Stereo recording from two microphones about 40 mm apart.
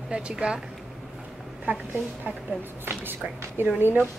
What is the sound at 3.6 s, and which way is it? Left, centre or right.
Speech, right.